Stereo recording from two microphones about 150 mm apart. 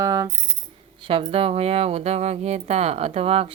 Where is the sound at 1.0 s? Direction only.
35° right (ahead or behind).